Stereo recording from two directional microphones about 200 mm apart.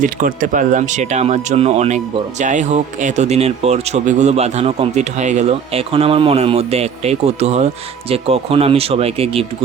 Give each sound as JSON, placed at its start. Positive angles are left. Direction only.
{"t": 0.0, "sound": "speech", "side_deg": -40}